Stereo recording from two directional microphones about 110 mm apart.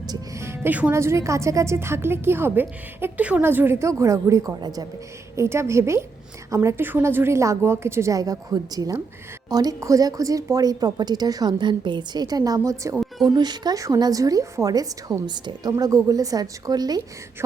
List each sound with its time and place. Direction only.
0.1 s music: 25° right (ahead or behind)
0.9 s a woman's voice: 25° right (ahead or behind)
5.4 s a woman's voice: 25° right (ahead or behind)
13.2 s a woman's voice: 40° right (ahead or behind)